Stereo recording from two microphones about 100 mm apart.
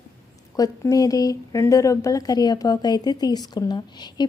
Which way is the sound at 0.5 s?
35° left (ahead or behind).